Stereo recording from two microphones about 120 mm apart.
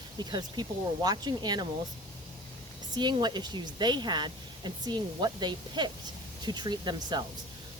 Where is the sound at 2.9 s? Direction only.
40° right (ahead or behind).